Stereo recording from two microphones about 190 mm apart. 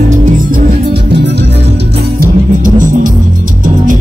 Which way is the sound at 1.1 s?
60° right (ahead or behind).